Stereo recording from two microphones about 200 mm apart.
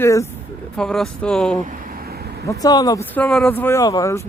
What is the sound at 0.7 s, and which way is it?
Speech, 5° left (ahead or behind).